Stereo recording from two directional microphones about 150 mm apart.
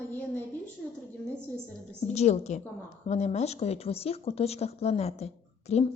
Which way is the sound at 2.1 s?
50° left (ahead or behind).